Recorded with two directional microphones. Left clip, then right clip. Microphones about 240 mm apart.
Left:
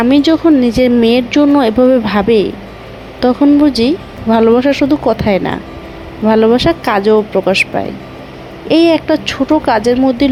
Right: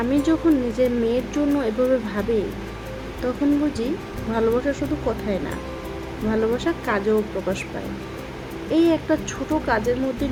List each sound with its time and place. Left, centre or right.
0.0 s speech: left
3.2 s speech: left
8.7 s speech: left